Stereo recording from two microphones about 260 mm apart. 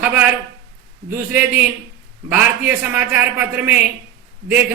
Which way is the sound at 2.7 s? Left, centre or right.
Centre.